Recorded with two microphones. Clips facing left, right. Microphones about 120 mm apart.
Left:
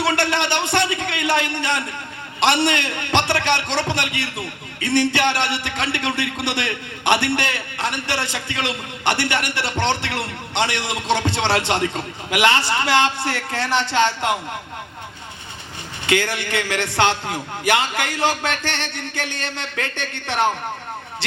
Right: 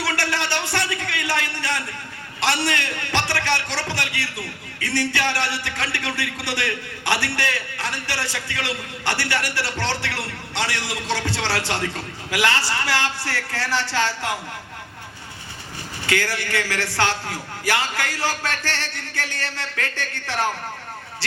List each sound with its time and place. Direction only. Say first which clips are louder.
0.0 s a sound: left 5 dB; 20° left (ahead or behind)
2.4 s a man's voice: left 5 dB; 20° left (ahead or behind)
16.0 s a man's voice: left 3 dB; 20° left (ahead or behind)